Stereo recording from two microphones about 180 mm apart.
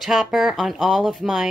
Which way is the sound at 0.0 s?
Centre (ahead or behind).